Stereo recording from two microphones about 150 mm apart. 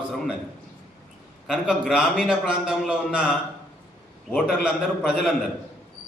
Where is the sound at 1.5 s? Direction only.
5° right (ahead or behind).